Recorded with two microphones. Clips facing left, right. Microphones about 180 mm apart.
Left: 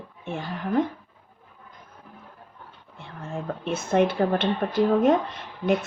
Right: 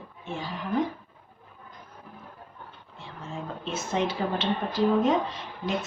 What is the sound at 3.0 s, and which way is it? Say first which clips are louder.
A woman's voice: left 3 dB; 60° left (ahead or behind).